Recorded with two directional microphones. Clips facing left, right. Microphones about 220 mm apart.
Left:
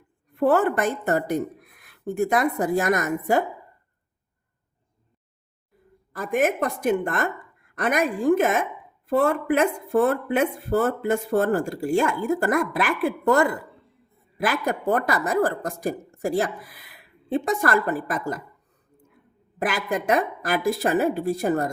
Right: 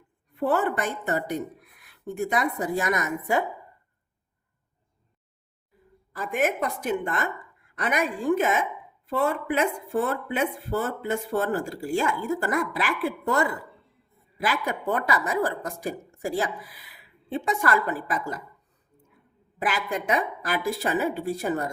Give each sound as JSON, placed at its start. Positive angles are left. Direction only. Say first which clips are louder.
{"t": 0.3, "sound": "speech", "louder": "left 5 dB", "side_deg": 50}
{"t": 6.1, "sound": "speech", "louder": "left 3 dB", "side_deg": 45}
{"t": 19.5, "sound": "speech", "louder": "left 3 dB", "side_deg": 45}